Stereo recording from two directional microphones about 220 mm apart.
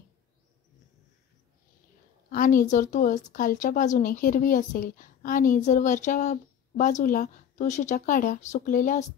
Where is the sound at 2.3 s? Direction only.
40° left (ahead or behind).